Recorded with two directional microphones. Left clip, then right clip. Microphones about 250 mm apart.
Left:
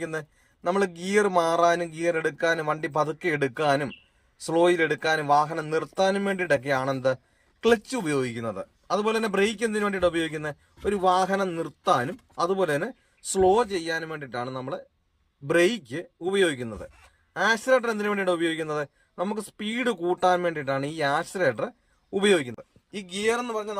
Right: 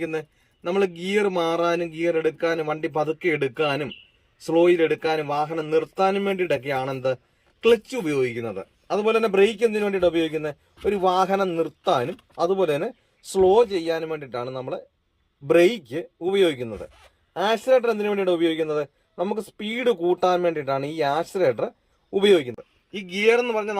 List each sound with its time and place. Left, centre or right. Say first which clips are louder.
0.7 s a man's voice: right 2 dB; centre